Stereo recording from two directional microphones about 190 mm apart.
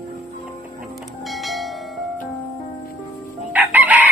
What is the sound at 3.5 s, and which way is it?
Chicken, 10° right (ahead or behind).